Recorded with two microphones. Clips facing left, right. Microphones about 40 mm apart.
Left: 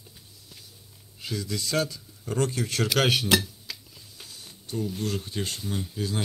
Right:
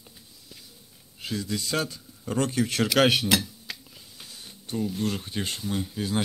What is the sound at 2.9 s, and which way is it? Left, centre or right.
Speech, centre.